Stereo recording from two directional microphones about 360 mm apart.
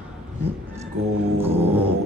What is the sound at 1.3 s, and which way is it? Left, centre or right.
Dog, centre.